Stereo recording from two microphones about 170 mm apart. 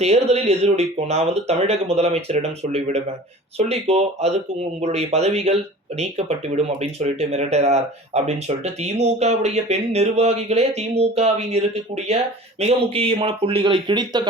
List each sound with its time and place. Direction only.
0.0 s speech: 40° right (ahead or behind)